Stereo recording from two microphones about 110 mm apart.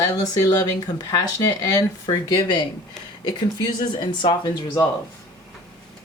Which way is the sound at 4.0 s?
45° left (ahead or behind).